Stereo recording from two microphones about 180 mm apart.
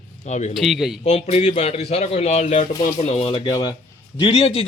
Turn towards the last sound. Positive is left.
turn(degrees=35)  # may be behind; listen again after turning